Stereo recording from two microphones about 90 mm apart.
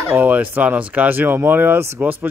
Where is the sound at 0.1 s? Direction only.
20° right (ahead or behind).